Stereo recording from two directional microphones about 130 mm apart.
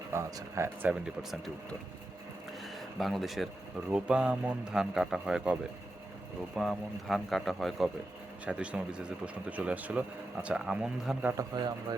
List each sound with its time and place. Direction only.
0.1 s speech: 25° right (ahead or behind); by 1.4 s 10° right (ahead or behind)
2.7 s a man's voice: centre (ahead or behind)
6.6 s a man's voice: centre (ahead or behind)
11.3 s a man's voice: 30° right (ahead or behind)